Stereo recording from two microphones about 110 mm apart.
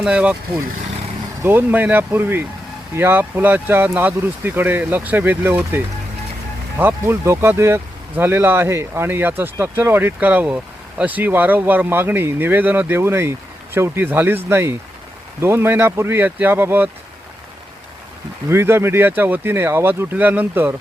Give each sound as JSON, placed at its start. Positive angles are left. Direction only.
{"t": 0.0, "sound": "speech", "side_deg": -10}
{"t": 1.4, "sound": "speech", "side_deg": -20}
{"t": 18.4, "sound": "speech", "side_deg": -20}